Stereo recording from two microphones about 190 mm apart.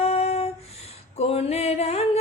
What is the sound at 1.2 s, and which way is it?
Music, 35° left (ahead or behind).